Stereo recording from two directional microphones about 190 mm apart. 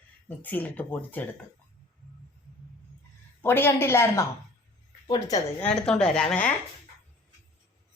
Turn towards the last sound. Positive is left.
turn(degrees=5)  # may be behind; listen again after turning